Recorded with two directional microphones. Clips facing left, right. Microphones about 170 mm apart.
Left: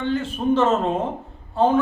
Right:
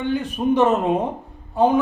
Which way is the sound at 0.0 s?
15° right (ahead or behind).